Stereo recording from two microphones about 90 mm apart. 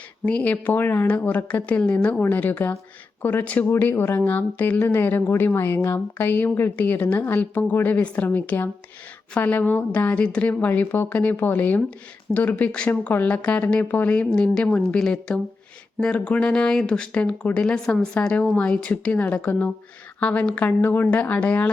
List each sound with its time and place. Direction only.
0.3 s speech: 15° left (ahead or behind)